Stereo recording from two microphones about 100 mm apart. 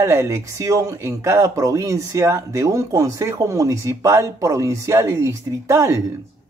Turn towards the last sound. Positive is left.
turn(degrees=-30)  # may be behind; listen again after turning